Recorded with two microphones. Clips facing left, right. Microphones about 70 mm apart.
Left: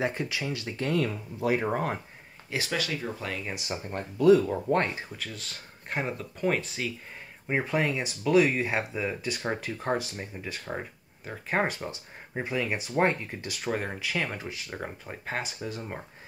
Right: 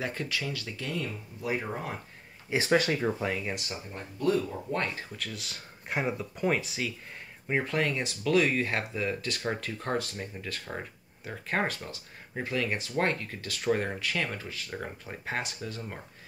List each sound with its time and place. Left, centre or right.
0.0 s speech: centre
0.9 s speech: left
2.5 s speech: right
3.2 s speech: centre
4.7 s speech: left
5.1 s speech: centre
7.4 s speech: centre
15.0 s speech: centre
15.6 s speech: centre